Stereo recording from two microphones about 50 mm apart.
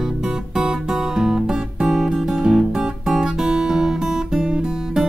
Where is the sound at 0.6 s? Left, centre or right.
Centre.